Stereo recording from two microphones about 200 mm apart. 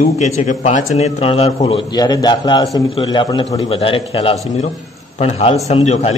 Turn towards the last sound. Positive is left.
turn(degrees=30)  # may be behind; listen again after turning